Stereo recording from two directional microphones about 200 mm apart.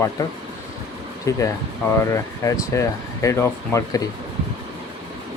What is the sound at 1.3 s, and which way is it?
Speech, 15° left (ahead or behind).